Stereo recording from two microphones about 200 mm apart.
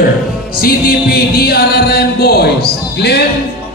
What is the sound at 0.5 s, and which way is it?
Music, 50° left (ahead or behind).